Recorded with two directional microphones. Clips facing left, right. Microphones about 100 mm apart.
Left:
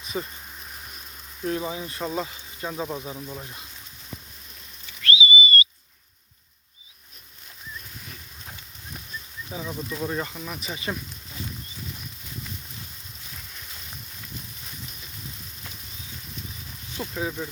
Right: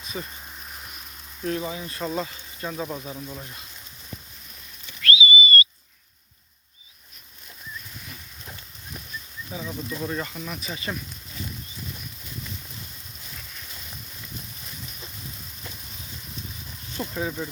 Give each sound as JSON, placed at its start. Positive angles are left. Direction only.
{"t": 0.1, "sound": "speech", "side_deg": 25}
{"t": 1.5, "sound": "speech", "side_deg": 20}
{"t": 5.0, "sound": "whistle", "side_deg": 25}
{"t": 9.5, "sound": "speech", "side_deg": 20}
{"t": 10.6, "sound": "speech", "side_deg": 15}
{"t": 17.0, "sound": "speech", "side_deg": 5}